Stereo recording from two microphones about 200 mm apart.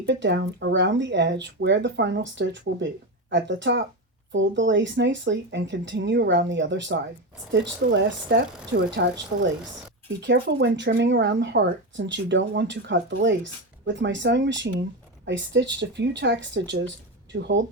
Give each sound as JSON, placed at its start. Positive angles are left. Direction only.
{"t": 0.0, "sound": "speech", "side_deg": -60}